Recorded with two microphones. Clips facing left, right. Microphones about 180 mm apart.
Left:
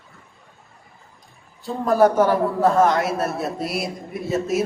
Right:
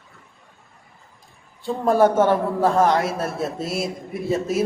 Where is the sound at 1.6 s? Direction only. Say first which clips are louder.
Even; 30° right (ahead or behind).